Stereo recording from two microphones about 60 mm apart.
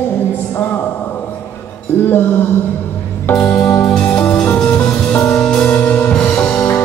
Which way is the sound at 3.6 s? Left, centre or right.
Left.